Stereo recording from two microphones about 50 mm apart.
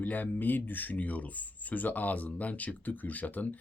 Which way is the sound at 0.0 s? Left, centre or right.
Left.